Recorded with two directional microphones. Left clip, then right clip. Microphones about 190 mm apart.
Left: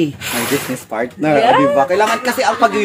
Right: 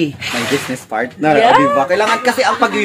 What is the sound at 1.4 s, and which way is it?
Speech, 20° right (ahead or behind).